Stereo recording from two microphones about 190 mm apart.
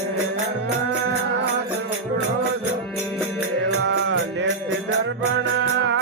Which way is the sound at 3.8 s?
70° right (ahead or behind).